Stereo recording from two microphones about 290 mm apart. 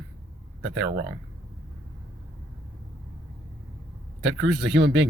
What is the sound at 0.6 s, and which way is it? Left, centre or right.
Speech, right.